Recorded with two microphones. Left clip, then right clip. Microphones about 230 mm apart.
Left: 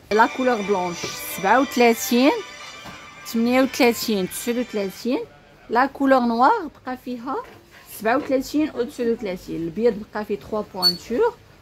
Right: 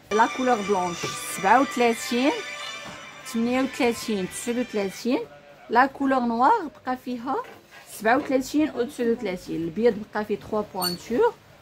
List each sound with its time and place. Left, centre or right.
0.1 s a woman's voice: centre
4.6 s speech: centre